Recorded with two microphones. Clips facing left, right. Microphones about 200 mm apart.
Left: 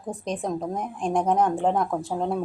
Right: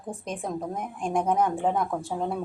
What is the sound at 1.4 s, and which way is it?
Speech, 50° left (ahead or behind).